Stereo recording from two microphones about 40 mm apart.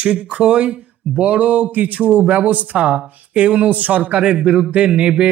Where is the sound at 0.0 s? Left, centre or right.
Right.